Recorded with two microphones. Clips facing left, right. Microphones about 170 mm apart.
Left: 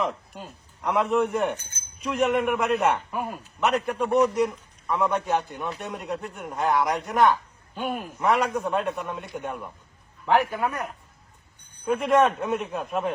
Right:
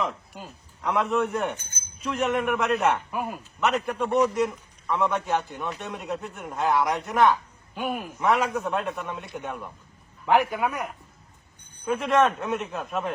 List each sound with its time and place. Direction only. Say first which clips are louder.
0.0 s a man's voice: left 2 dB; centre (ahead or behind)
10.2 s a man's voice: even; 10° right (ahead or behind)
11.9 s a man's voice: left 1 dB; centre (ahead or behind)